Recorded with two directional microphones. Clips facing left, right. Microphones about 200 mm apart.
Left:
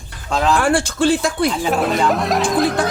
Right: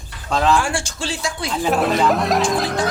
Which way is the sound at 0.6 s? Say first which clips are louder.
Left 6 dB; 55° left (ahead or behind).